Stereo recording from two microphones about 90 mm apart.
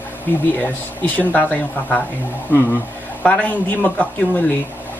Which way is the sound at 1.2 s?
20° left (ahead or behind).